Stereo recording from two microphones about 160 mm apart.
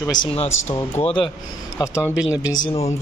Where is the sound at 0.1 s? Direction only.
35° left (ahead or behind).